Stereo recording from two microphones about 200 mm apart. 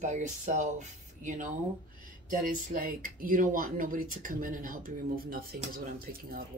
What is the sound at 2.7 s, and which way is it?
Speech, 45° right (ahead or behind).